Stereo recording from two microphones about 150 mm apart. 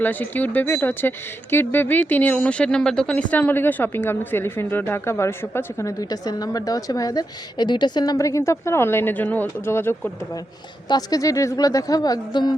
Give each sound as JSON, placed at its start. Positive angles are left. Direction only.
{"t": 0.0, "sound": "speech", "side_deg": 10}
{"t": 10.8, "sound": "speech", "side_deg": 25}